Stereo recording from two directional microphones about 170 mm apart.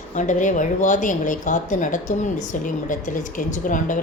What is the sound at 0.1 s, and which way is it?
A woman's voice, 45° left (ahead or behind).